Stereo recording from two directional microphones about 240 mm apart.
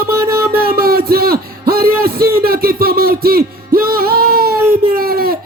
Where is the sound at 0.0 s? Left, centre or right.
Right.